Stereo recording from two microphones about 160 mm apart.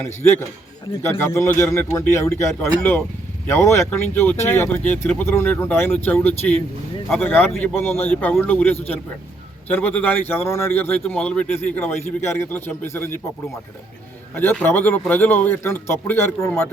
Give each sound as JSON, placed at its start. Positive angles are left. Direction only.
{"t": 1.0, "sound": "speech", "side_deg": 15}
{"t": 14.5, "sound": "speech", "side_deg": 10}